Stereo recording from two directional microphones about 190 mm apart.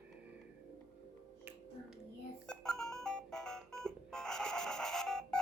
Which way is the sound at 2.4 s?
5° left (ahead or behind).